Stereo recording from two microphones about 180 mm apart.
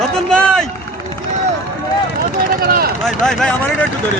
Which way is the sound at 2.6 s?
55° right (ahead or behind).